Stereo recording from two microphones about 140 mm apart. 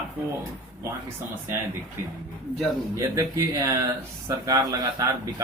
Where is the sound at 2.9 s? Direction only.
25° right (ahead or behind).